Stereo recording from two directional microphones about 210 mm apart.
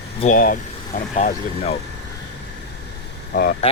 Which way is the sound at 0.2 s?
40° left (ahead or behind).